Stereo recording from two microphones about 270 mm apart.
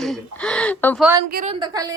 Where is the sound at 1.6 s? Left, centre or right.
Centre.